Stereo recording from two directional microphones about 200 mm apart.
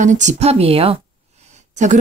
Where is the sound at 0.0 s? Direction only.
35° right (ahead or behind).